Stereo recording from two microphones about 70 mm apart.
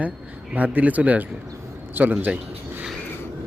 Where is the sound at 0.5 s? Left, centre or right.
Right.